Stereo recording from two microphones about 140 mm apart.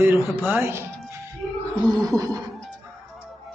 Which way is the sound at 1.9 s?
25° right (ahead or behind).